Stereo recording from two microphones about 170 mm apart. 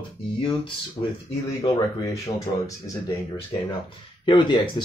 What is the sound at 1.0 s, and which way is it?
Speech, 40° left (ahead or behind).